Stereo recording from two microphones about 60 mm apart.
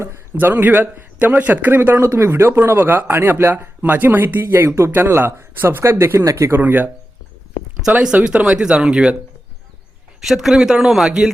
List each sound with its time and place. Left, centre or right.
0.3 s speech: right
1.2 s speech: right
2.0 s speech: right
3.5 s speech: right
6.1 s speech: right
6.5 s speech: right
8.0 s a man's voice: centre
10.2 s a man's voice: centre